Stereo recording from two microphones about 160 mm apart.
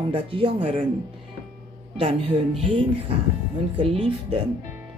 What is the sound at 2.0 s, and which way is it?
Speech, 40° right (ahead or behind).